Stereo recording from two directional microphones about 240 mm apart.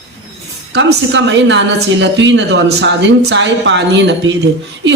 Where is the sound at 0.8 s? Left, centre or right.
Right.